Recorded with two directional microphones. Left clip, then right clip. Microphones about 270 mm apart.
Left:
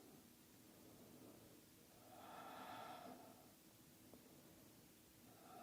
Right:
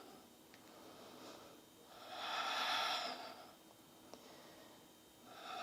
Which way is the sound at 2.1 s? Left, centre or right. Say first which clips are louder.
Right 16 dB; centre.